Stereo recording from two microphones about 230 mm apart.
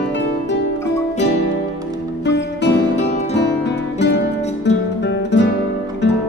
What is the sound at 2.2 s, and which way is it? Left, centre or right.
Music, left.